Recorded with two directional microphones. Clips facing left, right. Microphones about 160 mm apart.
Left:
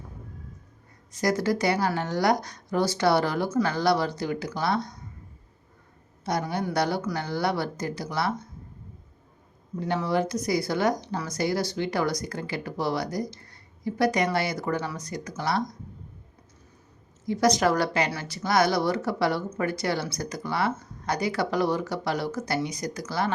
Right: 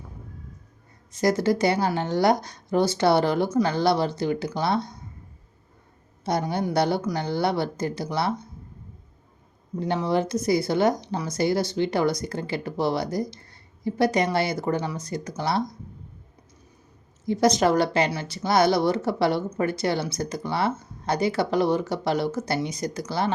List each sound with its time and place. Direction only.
1.1 s speech: 25° right (ahead or behind)
6.2 s speech: 25° right (ahead or behind)
9.8 s speech: 25° right (ahead or behind)
17.2 s speech: 25° right (ahead or behind)